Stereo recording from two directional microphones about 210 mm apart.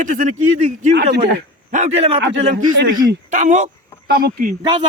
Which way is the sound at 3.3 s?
35° right (ahead or behind).